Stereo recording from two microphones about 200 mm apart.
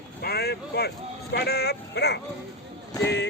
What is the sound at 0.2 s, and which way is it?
Speech, 50° left (ahead or behind).